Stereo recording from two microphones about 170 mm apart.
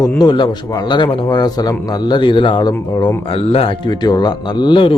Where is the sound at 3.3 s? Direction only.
35° left (ahead or behind).